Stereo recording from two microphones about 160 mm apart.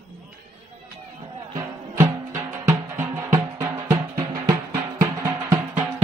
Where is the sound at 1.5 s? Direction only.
20° right (ahead or behind).